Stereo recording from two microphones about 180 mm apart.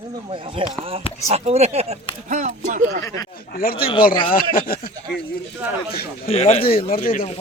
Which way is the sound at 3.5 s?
55° left (ahead or behind).